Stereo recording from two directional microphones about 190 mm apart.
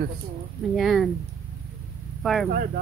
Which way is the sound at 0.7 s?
Centre (ahead or behind).